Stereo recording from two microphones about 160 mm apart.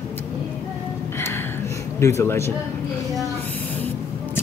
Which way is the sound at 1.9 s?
15° left (ahead or behind).